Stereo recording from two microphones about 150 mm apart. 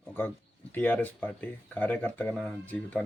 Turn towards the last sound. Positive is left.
turn(degrees=10)  # may be behind; listen again after turning